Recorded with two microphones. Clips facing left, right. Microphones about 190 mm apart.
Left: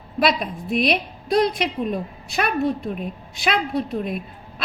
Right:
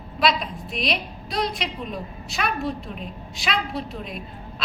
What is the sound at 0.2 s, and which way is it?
A woman's voice, 55° left (ahead or behind).